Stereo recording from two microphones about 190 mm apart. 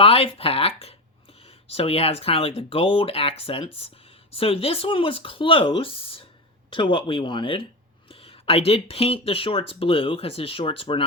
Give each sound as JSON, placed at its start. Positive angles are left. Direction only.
{"t": 0.0, "sound": "speech", "side_deg": 30}